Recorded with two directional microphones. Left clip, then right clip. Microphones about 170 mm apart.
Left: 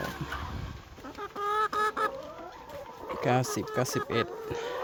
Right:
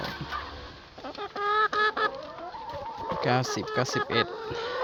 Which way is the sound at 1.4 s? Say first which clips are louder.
Right 4 dB; 40° left (ahead or behind).